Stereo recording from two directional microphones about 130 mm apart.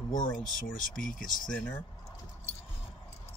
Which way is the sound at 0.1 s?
90° left.